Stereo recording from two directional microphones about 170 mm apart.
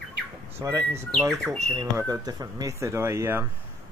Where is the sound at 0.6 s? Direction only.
15° right (ahead or behind).